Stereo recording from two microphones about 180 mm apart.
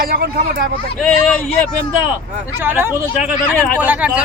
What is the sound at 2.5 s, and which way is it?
Speech, 10° right (ahead or behind).